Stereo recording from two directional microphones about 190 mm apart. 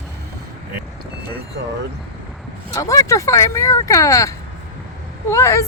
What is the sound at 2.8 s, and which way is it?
Speech, 15° left (ahead or behind).